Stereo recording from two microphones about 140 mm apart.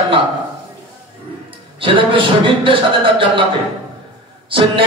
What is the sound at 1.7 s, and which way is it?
Speech, 40° right (ahead or behind).